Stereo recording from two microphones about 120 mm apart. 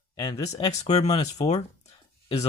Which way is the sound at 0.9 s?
65° left (ahead or behind).